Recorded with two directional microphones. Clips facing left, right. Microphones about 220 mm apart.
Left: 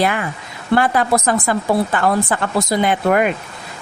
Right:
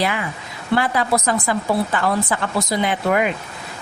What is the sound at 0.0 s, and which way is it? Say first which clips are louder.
Speech: left 3 dB; 50° left (ahead or behind).